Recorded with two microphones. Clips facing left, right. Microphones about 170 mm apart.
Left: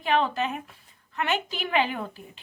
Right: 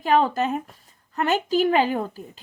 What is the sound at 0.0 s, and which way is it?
A woman's voice, 40° right (ahead or behind).